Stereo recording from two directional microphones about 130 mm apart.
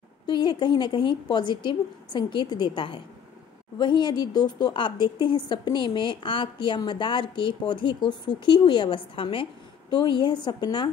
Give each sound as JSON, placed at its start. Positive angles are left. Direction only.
{"t": 0.3, "sound": "a woman's voice", "side_deg": 35}